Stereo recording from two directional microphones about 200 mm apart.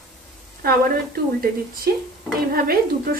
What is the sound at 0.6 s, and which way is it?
A woman's voice, 50° right (ahead or behind).